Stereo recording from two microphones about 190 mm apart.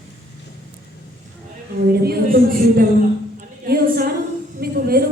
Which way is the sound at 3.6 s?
50° right (ahead or behind).